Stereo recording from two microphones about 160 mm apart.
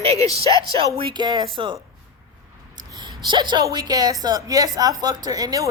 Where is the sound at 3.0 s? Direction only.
30° right (ahead or behind).